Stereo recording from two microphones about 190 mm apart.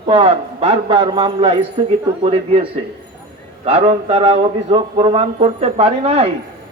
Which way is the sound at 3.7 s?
30° right (ahead or behind).